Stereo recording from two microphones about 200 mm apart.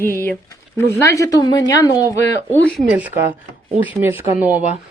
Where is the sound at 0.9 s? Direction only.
15° left (ahead or behind).